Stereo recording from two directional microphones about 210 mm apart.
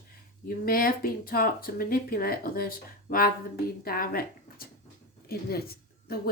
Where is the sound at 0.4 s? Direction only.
45° left (ahead or behind).